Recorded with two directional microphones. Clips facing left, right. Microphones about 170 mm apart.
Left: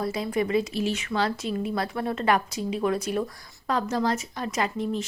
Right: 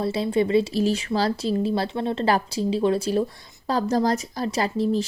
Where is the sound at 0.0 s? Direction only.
30° right (ahead or behind).